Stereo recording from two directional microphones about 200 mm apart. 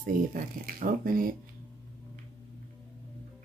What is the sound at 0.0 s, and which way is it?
Speech, 45° right (ahead or behind).